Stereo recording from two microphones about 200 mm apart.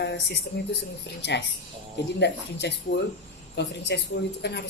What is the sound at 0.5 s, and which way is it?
Speech, 55° left (ahead or behind).